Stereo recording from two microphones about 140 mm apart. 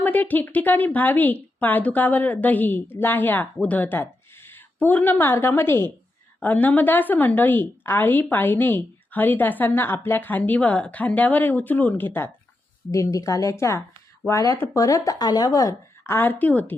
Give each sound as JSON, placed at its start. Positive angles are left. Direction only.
{"t": 0.0, "sound": "a woman's voice", "side_deg": 10}